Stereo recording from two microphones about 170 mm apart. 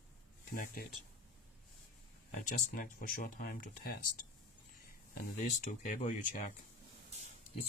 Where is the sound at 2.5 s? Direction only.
50° left (ahead or behind).